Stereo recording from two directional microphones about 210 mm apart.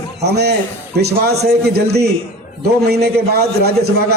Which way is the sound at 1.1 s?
50° right (ahead or behind).